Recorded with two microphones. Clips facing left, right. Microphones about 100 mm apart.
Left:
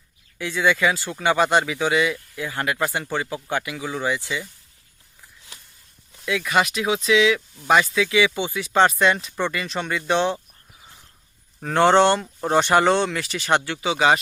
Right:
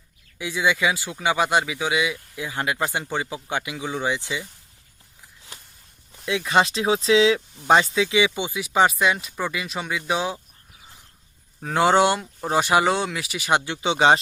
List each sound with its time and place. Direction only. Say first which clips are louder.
0.3 s speech: left 2 dB; 15° right (ahead or behind)
6.2 s speech: right 1 dB; 25° right (ahead or behind); by 10.4 s 5° right (ahead or behind)
11.6 s speech: left 2 dB; 5° right (ahead or behind)
13.8 s speech: right 2 dB; 25° right (ahead or behind)